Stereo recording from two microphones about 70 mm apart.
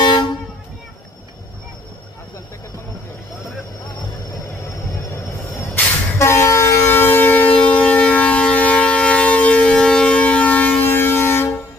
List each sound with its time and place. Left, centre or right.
0.0 s vehicle: left
6.1 s vehicle: left
7.5 s civil defense siren: centre
10.8 s vehicle: left